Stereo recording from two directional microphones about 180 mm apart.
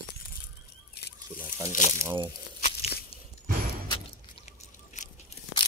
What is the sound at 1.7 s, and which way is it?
Speech, 45° left (ahead or behind).